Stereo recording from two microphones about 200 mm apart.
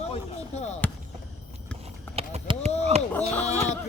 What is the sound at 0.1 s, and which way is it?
Chop, 35° left (ahead or behind).